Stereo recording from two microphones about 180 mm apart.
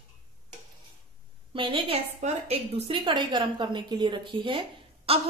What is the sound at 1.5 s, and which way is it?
A woman's voice, 30° right (ahead or behind).